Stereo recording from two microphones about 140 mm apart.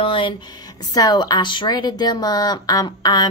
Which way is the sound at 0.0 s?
40° left (ahead or behind).